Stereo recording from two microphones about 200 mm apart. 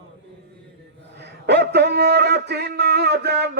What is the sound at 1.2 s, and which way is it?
Speech, 55° right (ahead or behind).